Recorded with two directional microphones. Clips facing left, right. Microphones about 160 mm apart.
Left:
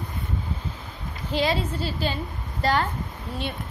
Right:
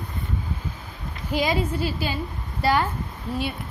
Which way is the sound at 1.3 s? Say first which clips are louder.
Right 1 dB; 10° right (ahead or behind).